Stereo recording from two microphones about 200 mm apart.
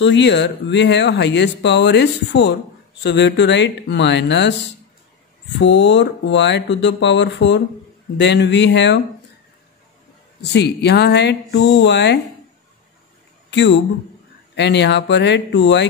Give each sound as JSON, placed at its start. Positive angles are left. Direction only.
{"t": 0.0, "sound": "speech", "side_deg": 60}
{"t": 5.6, "sound": "speech", "side_deg": 60}
{"t": 10.4, "sound": "speech", "side_deg": 55}
{"t": 13.5, "sound": "speech", "side_deg": 60}